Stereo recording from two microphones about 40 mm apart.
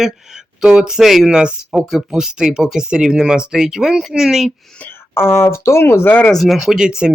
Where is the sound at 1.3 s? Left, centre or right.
Right.